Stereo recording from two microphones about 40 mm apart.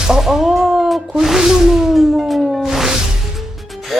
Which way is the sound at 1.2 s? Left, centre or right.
Centre.